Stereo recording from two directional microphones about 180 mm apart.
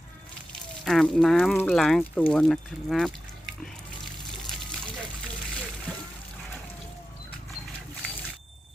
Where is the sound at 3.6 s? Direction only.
Centre (ahead or behind).